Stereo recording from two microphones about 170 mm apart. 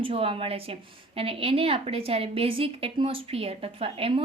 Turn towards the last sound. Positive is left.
turn(degrees=-35)  # may be behind; listen again after turning